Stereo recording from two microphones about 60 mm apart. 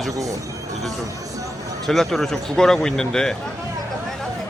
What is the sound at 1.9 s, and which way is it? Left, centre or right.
Speech, centre.